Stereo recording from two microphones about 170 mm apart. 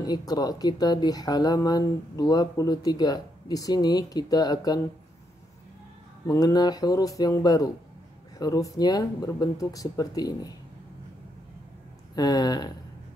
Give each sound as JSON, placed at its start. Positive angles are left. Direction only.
{"t": 0.0, "sound": "speech", "side_deg": 25}
{"t": 6.2, "sound": "speech", "side_deg": 20}
{"t": 12.2, "sound": "speech", "side_deg": 25}